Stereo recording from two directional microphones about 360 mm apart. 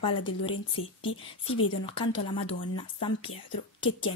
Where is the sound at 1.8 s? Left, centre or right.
Centre.